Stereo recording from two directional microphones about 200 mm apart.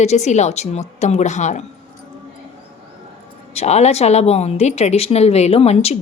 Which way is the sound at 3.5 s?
35° left (ahead or behind).